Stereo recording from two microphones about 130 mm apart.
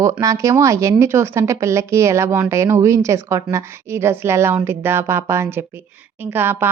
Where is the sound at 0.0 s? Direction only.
25° right (ahead or behind).